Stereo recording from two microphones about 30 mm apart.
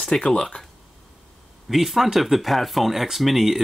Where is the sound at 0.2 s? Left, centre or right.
Left.